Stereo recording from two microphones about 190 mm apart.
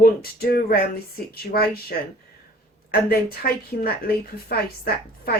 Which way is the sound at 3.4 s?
50° left (ahead or behind).